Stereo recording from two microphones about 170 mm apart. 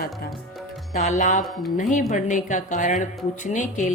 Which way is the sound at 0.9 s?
45° left (ahead or behind).